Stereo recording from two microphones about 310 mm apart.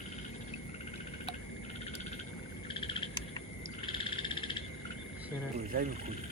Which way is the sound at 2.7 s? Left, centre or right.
Centre.